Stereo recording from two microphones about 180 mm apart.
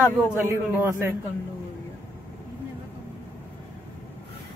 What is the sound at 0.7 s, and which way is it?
Speech, 15° right (ahead or behind).